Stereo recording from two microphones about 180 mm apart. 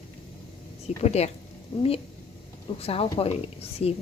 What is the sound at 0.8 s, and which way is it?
Speech, 35° left (ahead or behind).